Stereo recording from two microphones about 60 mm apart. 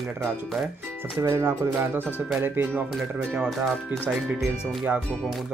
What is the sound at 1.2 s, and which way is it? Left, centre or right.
Speech, right.